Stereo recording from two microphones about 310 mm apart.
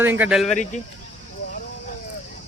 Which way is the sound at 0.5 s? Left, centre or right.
Left.